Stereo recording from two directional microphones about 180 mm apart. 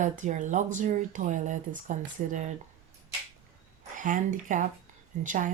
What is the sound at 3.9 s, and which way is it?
Speech, 45° right (ahead or behind).